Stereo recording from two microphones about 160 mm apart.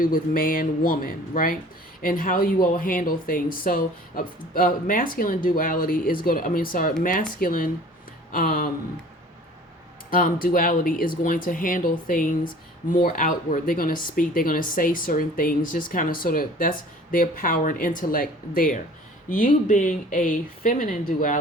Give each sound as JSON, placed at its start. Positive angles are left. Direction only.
{"t": 0.0, "sound": "speech", "side_deg": 60}
{"t": 10.1, "sound": "speech", "side_deg": 60}